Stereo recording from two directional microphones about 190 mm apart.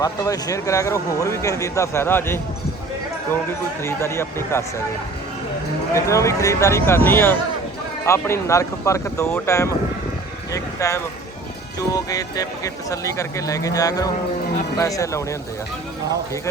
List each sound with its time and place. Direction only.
0.0 s speech: 20° left (ahead or behind)
3.8 s speech: 15° left (ahead or behind)
5.9 s speech: 15° left (ahead or behind)